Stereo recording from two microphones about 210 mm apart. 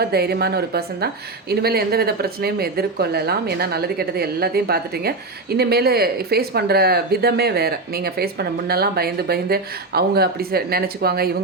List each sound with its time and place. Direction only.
0.0 s a woman's voice: 50° right (ahead or behind)